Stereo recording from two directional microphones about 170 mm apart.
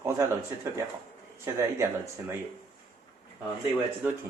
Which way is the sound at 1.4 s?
15° right (ahead or behind).